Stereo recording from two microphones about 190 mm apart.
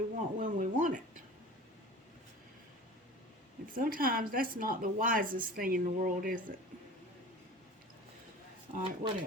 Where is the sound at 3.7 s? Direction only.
45° right (ahead or behind).